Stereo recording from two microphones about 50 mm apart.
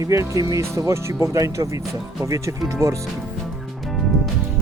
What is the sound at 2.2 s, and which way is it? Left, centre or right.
Speech, right.